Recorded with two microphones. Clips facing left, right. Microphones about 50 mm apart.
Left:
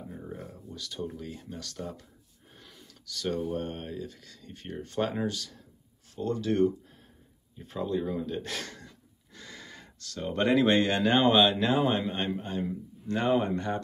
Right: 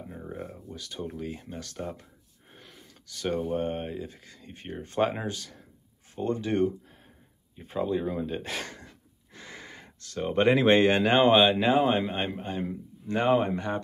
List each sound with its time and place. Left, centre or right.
0.1 s a sound: right
0.7 s speech: right
2.5 s gasp: centre
3.1 s speech: right
7.5 s a man's voice: right
8.8 s gasp: right
11.6 s a man's voice: centre